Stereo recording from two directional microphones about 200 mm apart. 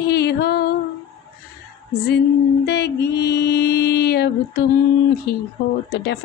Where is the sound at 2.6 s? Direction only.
55° left (ahead or behind).